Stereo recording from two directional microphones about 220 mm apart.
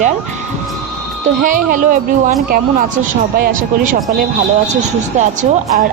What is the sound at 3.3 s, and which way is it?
Speech, 45° right (ahead or behind).